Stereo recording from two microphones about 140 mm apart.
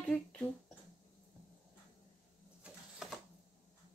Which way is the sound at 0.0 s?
5° left (ahead or behind).